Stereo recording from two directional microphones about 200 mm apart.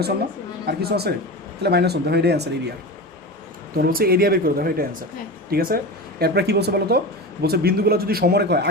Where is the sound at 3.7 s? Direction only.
50° right (ahead or behind).